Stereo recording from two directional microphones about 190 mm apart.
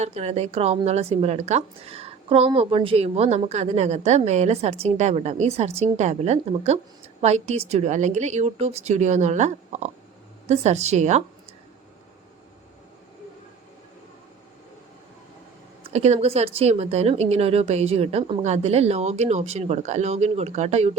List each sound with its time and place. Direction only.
0.0 s a woman's voice: 35° right (ahead or behind)
15.8 s a woman's voice: 35° right (ahead or behind)